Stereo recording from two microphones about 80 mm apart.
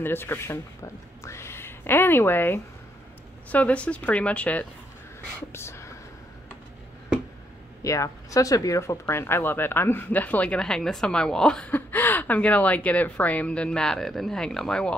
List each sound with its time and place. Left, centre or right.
0.0 s speech: left
1.2 s a sound: left
3.5 s speech: centre
5.5 s speech: left
7.8 s speech: left; by 11.7 s centre
11.7 s speech: left